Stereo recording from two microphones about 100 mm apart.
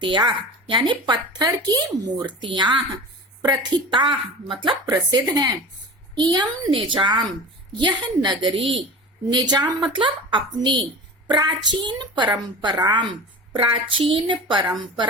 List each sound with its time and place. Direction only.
0.0 s speech: 55° right (ahead or behind)
5.3 s speech: 40° right (ahead or behind)
6.7 s a woman's voice: 60° right (ahead or behind)
13.5 s a woman's voice: 55° right (ahead or behind)